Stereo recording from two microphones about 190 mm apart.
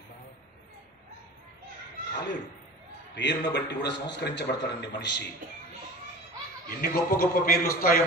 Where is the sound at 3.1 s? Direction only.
65° left (ahead or behind).